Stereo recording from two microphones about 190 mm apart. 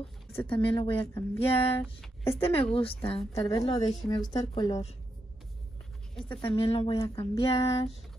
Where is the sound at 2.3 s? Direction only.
30° left (ahead or behind).